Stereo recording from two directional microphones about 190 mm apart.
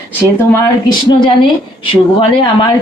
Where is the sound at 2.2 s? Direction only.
25° left (ahead or behind).